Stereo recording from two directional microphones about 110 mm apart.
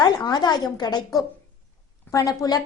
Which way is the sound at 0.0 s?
40° left (ahead or behind).